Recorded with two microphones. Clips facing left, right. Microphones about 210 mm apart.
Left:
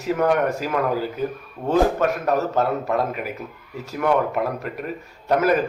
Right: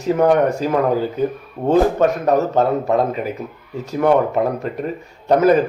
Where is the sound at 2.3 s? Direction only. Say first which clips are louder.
Right 5 dB; 20° right (ahead or behind).